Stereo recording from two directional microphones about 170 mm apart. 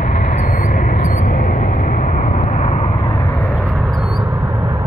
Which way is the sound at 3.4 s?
Centre (ahead or behind).